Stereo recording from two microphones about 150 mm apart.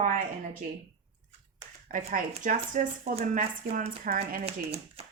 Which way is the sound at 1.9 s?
60° right (ahead or behind).